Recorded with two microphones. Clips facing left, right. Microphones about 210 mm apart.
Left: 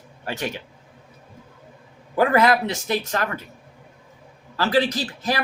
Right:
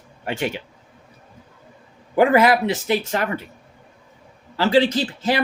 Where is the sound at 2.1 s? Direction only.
20° right (ahead or behind).